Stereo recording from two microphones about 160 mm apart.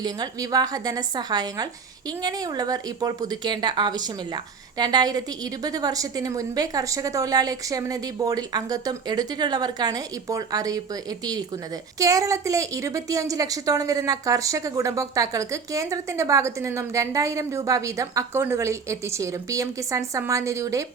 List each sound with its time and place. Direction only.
0.0 s a woman's voice: 25° right (ahead or behind)
11.9 s a woman's voice: 20° right (ahead or behind)